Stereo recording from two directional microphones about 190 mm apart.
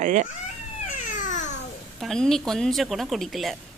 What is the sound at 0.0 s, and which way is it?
Speech, 40° right (ahead or behind).